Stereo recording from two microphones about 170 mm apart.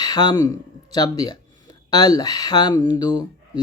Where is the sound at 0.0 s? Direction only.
25° left (ahead or behind).